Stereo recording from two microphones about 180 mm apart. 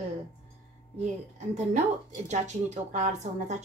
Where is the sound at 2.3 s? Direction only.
40° right (ahead or behind).